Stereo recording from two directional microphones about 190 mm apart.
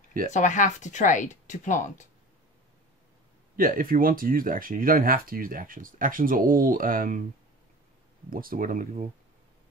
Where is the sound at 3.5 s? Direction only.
50° right (ahead or behind).